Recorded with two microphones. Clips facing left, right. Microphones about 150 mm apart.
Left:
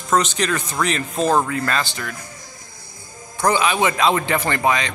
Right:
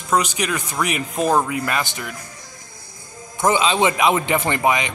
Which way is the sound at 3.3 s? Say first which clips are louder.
Right 1 dB; 20° right (ahead or behind).